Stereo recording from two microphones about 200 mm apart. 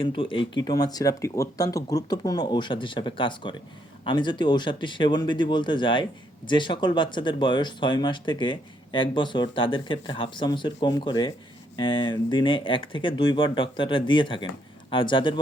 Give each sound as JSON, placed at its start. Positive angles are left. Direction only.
{"t": 0.0, "sound": "speech", "side_deg": 25}